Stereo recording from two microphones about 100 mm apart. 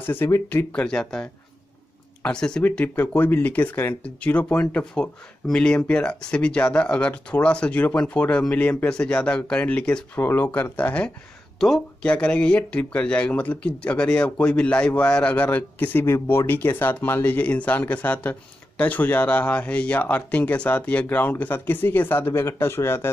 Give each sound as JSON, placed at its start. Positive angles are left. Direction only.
{"t": 0.0, "sound": "speech", "side_deg": 20}
{"t": 0.7, "sound": "speech", "side_deg": 10}